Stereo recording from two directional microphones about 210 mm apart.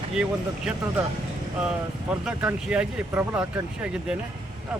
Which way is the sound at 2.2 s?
5° right (ahead or behind).